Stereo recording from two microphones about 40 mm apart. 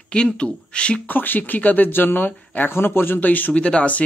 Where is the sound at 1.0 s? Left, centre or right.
Left.